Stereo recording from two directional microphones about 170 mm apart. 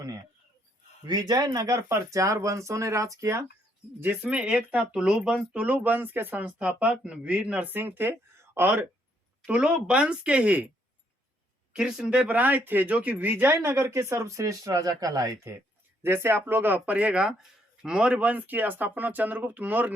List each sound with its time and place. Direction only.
1.0 s speech: 25° right (ahead or behind); by 10.7 s 10° right (ahead or behind)
11.8 s speech: 5° right (ahead or behind)